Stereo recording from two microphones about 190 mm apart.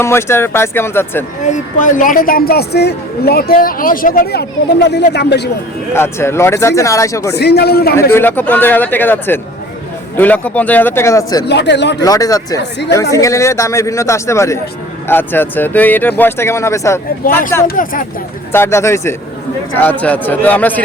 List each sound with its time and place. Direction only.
0.0 s speech: 15° left (ahead or behind)
1.5 s a woman's voice: 40° left (ahead or behind); by 5.5 s 60° left (ahead or behind)
5.9 s speech: 15° left (ahead or behind)
7.3 s speech: 60° left (ahead or behind)
8.1 s speech: 10° left (ahead or behind)
11.4 s speech: 65° left (ahead or behind)
12.0 s speech: 20° left (ahead or behind)
17.7 s a woman's voice: 45° left (ahead or behind)
18.5 s speech: 15° left (ahead or behind)